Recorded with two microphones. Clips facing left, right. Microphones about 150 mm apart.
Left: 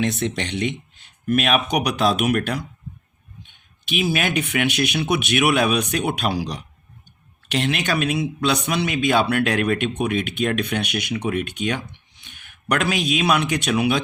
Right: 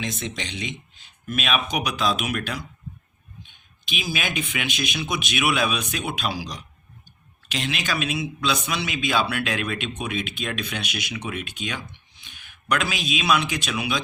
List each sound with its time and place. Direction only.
0.0 s speech: 60° left (ahead or behind)
3.9 s a man's voice: 65° left (ahead or behind)